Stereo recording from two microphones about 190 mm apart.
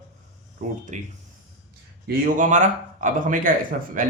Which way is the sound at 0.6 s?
40° right (ahead or behind).